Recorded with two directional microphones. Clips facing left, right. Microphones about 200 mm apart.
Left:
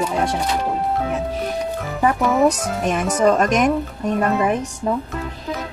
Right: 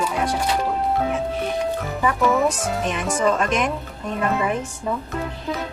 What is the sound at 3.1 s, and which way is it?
Speech, 40° left (ahead or behind).